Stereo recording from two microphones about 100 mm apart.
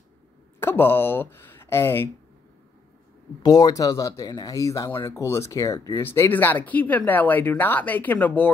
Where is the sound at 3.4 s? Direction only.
40° left (ahead or behind).